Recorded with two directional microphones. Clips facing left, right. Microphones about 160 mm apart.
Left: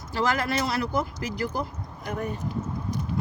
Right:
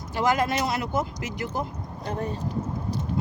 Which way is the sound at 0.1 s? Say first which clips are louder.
Right 2 dB; 20° right (ahead or behind).